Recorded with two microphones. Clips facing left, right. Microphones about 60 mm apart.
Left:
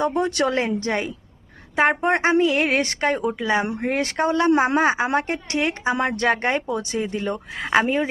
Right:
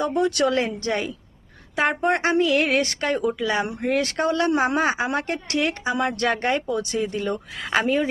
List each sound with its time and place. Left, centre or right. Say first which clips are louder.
0.0 s a woman's voice: even; left